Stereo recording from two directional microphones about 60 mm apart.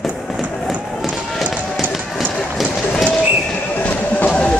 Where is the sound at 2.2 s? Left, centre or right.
Centre.